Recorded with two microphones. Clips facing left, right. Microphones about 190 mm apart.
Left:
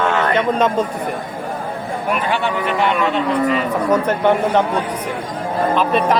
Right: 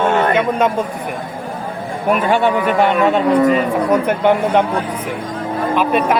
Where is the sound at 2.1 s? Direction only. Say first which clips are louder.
Right 6 dB; 45° right (ahead or behind).